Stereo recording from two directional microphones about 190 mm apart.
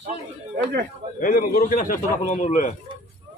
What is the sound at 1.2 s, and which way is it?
A man's voice, 45° left (ahead or behind).